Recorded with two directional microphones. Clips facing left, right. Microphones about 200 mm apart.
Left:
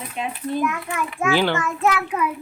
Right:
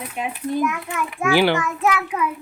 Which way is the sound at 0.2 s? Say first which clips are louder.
Right 1 dB; 10° right (ahead or behind).